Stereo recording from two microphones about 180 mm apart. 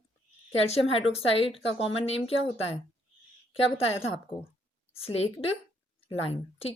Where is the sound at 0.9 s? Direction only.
35° left (ahead or behind).